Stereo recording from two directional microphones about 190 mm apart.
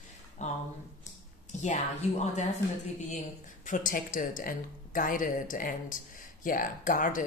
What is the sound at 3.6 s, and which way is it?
Speech, 45° left (ahead or behind).